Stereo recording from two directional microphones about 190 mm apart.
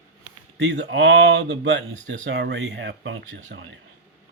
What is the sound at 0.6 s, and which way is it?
Speech, 70° right (ahead or behind).